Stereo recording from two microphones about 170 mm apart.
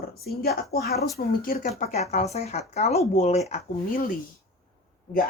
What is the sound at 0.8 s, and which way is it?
Speech, centre (ahead or behind).